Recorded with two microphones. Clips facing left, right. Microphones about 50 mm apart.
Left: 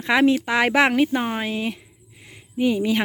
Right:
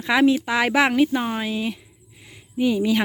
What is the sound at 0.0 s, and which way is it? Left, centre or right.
Speech, left.